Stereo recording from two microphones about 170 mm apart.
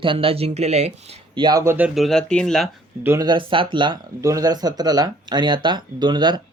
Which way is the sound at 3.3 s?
30° right (ahead or behind).